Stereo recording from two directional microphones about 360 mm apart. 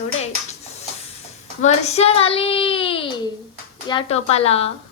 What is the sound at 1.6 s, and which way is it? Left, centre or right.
A child's voice, centre.